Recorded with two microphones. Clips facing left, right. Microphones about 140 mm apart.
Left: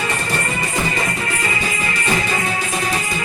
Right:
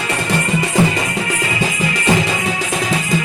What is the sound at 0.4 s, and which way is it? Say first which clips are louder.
Music: right 6 dB; 90° right.